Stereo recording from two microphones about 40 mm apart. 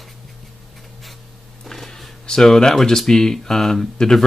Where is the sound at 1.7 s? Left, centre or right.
Centre.